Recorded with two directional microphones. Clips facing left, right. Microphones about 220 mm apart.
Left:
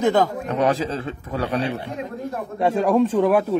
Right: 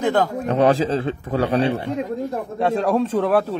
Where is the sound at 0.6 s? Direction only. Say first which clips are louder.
Right 4 dB; 30° right (ahead or behind).